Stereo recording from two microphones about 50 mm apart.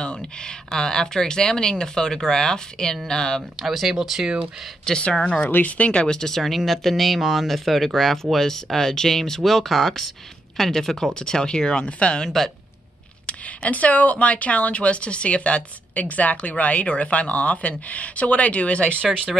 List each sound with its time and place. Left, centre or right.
0.7 s speech: centre
3.6 s speech: centre
4.8 s speech: centre
5.4 s speech: left; by 11.1 s centre
11.1 s speech: centre
13.3 s speech: left